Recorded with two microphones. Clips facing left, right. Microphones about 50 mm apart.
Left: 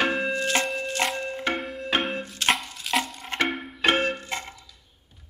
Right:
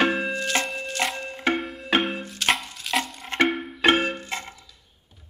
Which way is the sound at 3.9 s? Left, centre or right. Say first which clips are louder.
Right 2 dB; centre.